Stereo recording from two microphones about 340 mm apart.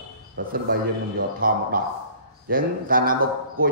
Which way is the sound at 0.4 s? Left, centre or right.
Right.